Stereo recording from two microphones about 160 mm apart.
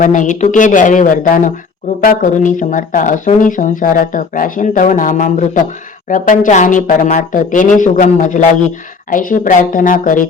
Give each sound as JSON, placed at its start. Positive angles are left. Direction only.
{"t": 0.0, "sound": "speech", "side_deg": 50}